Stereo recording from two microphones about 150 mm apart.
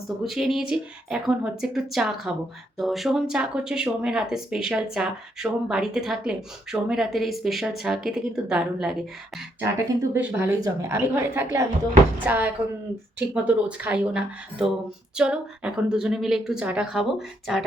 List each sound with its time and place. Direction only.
0.3 s speech: centre (ahead or behind)
9.7 s speech: 20° right (ahead or behind); by 17.6 s centre (ahead or behind)